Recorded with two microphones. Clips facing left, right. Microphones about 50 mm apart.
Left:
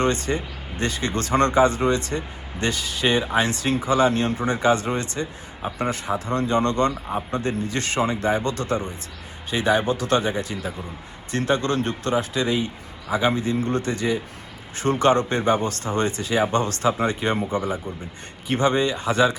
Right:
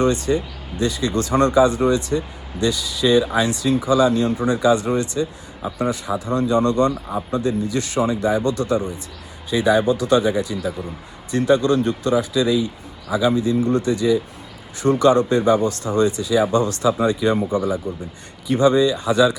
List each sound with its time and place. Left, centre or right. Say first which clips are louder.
0.0 s speech: right 4 dB; left